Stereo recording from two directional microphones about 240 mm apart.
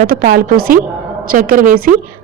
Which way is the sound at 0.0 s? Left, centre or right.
Right.